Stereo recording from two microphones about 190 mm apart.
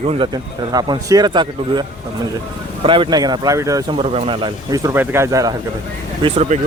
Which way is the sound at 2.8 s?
25° right (ahead or behind).